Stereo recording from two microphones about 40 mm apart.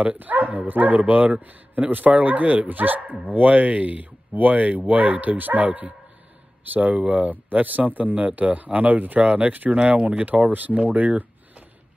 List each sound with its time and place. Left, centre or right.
0.2 s speech: right